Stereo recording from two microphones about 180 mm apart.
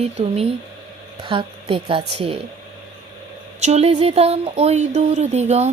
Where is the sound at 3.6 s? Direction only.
40° right (ahead or behind).